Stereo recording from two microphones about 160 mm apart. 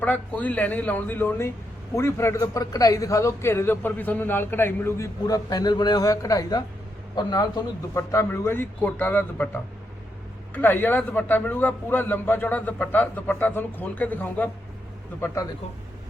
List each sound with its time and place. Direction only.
0.0 s a man's voice: 10° left (ahead or behind)
10.5 s a man's voice: 10° left (ahead or behind)